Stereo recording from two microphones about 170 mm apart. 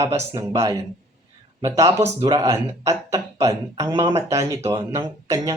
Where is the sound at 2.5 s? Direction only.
20° right (ahead or behind).